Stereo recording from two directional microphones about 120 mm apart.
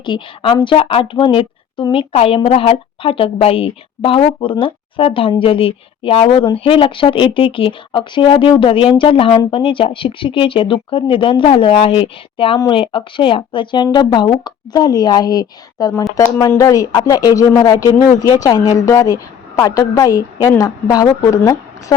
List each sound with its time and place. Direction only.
0.0 s a woman's voice: 40° left (ahead or behind)